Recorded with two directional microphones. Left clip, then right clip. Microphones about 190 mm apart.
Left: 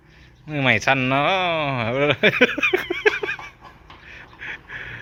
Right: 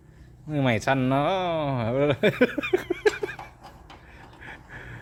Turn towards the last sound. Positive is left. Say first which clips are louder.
# left 9 dB
turn(degrees=-5)  # may be behind; listen again after turning